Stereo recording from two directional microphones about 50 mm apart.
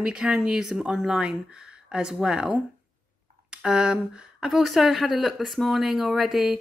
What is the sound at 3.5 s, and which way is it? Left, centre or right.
Speech, centre.